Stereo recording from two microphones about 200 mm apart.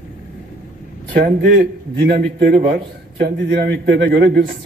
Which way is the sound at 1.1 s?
50° right (ahead or behind).